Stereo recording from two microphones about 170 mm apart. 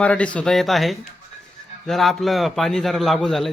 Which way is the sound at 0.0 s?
5° left (ahead or behind).